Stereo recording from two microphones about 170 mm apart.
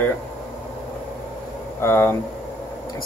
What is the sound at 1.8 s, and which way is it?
Speech, 15° left (ahead or behind).